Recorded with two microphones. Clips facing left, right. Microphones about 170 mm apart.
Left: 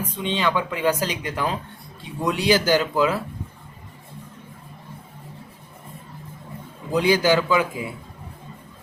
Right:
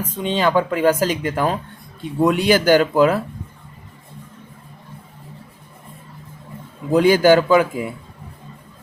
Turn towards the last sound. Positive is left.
turn(degrees=-50)  # may be behind; listen again after turning